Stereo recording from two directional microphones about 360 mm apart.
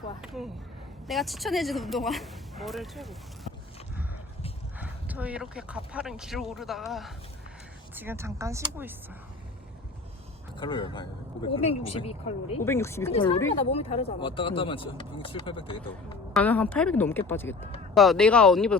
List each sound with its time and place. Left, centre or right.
1.0 s speech: centre
4.8 s speech: centre
10.6 s speech: centre